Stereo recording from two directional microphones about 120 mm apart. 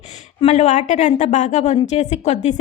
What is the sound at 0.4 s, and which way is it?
A woman's voice, 75° left (ahead or behind).